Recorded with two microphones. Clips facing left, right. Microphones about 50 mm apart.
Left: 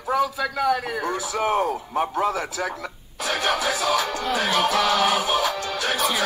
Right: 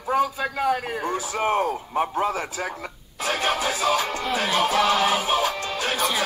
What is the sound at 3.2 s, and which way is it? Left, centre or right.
Music, right.